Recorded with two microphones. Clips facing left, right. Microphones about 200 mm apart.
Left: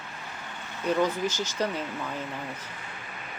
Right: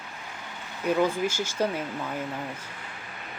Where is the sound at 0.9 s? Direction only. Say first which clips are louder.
Right 1 dB; 10° right (ahead or behind).